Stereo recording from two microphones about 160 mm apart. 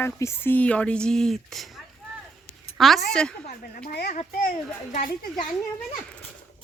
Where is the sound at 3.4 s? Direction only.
65° left (ahead or behind).